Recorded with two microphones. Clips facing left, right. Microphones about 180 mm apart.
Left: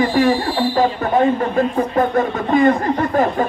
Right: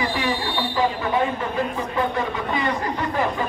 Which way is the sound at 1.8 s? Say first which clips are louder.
Left 7 dB; 50° left (ahead or behind).